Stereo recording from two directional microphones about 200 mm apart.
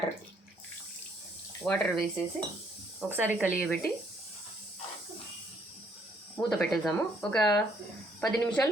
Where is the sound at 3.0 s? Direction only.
10° right (ahead or behind).